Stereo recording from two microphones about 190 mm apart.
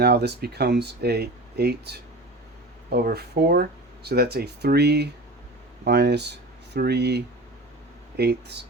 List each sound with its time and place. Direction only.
0.0 s speech: 60° right (ahead or behind)